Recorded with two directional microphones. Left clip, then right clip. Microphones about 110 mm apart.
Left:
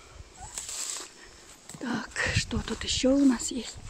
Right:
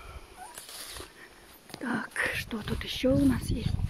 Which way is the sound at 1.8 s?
5° left (ahead or behind).